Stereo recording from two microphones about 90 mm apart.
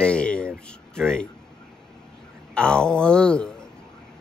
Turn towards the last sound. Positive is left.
turn(degrees=10)  # may be behind; listen again after turning